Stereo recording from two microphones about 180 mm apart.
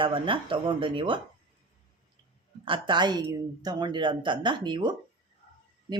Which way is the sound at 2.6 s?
25° right (ahead or behind).